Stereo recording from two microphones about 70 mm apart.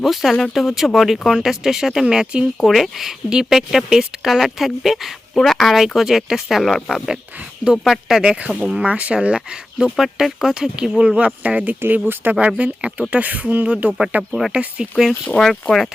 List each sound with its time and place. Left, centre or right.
0.0 s speech: centre
15.2 s speech: centre